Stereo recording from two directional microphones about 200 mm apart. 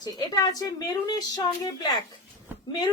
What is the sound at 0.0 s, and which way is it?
A woman's voice, 20° left (ahead or behind).